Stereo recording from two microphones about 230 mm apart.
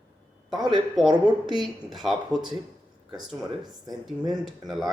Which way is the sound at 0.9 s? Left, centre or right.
Centre.